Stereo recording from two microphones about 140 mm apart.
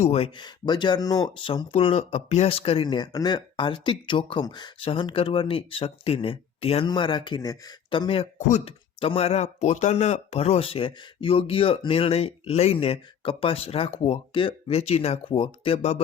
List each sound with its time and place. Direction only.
0.0 s speech: 45° left (ahead or behind)
0.3 s speech: 30° left (ahead or behind)
1.7 s speech: 45° left (ahead or behind)
8.4 s speech: 55° left (ahead or behind)
9.0 s speech: 45° left (ahead or behind)